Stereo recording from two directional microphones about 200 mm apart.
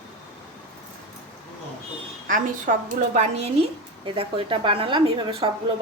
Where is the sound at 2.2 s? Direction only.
40° right (ahead or behind).